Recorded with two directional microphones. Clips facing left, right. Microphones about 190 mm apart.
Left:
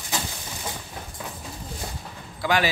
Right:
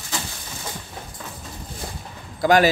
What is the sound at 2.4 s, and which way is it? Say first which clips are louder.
Speech: right 7 dB; 45° right (ahead or behind).